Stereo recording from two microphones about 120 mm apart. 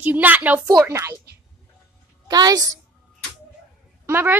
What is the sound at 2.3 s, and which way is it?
Speech, 35° right (ahead or behind).